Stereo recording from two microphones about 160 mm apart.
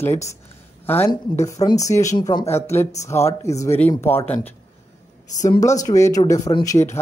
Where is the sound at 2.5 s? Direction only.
15° left (ahead or behind).